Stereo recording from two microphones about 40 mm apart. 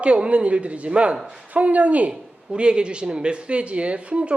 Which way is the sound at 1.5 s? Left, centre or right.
Right.